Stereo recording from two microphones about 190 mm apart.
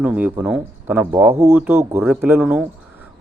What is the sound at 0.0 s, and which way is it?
Speech, 10° right (ahead or behind).